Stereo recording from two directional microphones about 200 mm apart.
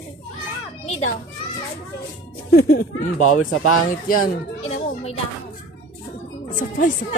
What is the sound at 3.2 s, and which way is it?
Speech, 90° left.